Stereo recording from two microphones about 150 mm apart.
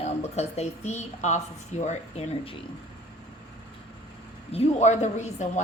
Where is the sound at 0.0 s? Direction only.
45° left (ahead or behind).